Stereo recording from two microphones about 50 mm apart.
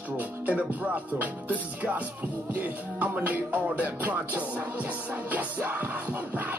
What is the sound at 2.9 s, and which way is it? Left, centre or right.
Music, right.